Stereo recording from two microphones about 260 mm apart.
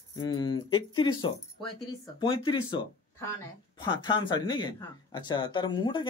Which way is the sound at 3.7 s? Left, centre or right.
Centre.